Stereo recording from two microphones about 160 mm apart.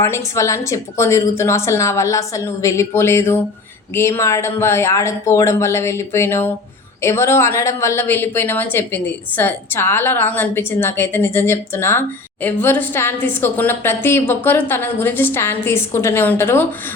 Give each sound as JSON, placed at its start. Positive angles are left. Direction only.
{"t": 0.0, "sound": "a woman's voice", "side_deg": 20}